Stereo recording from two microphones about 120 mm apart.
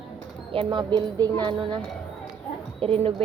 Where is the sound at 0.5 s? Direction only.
40° right (ahead or behind).